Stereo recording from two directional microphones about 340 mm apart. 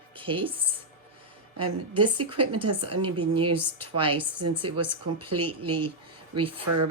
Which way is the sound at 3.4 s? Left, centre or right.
Right.